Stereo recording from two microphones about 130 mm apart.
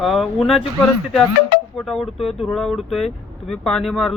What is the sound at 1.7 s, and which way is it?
Speech, centre (ahead or behind).